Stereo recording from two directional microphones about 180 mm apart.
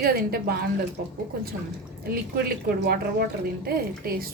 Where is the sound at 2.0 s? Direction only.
55° right (ahead or behind).